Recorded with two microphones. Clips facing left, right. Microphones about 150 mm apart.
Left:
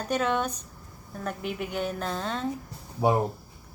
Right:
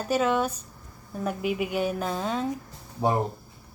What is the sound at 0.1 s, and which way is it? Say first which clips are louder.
A woman's voice: right 3 dB; 5° right (ahead or behind).